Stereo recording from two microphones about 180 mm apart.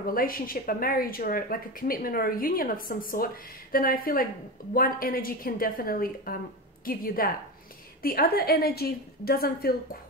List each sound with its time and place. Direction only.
0.1 s a woman's voice: 55° left (ahead or behind)